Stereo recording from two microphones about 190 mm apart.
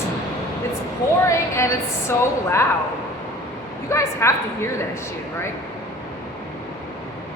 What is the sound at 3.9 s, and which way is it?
Speech, 15° left (ahead or behind).